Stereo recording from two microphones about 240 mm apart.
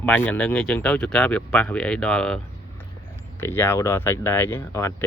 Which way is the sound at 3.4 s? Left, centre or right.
Centre.